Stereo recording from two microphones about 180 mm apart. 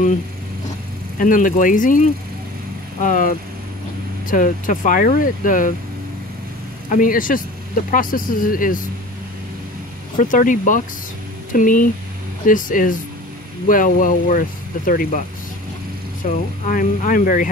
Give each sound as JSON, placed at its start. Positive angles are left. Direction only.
{"t": 1.1, "sound": "speech", "side_deg": 50}
{"t": 6.9, "sound": "speech", "side_deg": 50}
{"t": 10.1, "sound": "speech", "side_deg": 45}
{"t": 16.3, "sound": "speech", "side_deg": 45}